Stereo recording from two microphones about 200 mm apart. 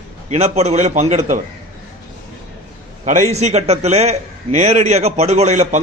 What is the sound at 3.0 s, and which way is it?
A man's voice, 40° right (ahead or behind).